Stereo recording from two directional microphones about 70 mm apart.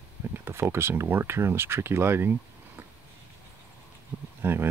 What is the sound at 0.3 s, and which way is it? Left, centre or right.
Speech, right.